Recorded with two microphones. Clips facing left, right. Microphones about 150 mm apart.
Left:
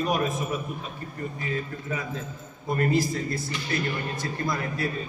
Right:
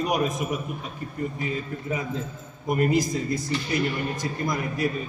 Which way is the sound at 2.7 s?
15° right (ahead or behind).